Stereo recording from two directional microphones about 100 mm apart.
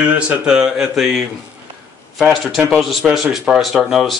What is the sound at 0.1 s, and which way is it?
Speech, 20° right (ahead or behind).